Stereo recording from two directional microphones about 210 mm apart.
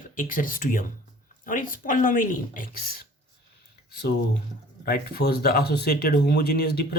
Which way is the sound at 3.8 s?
50° left (ahead or behind).